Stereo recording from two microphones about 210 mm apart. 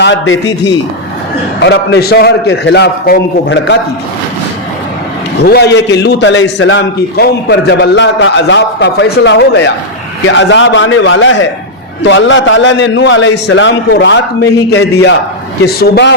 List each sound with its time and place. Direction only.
0.0 s a man's voice: 60° left (ahead or behind)
5.4 s a man's voice: 50° left (ahead or behind)